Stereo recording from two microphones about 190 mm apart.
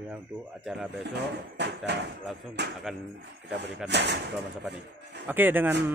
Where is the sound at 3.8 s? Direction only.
65° right (ahead or behind).